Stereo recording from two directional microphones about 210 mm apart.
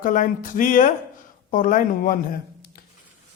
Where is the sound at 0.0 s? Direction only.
40° left (ahead or behind).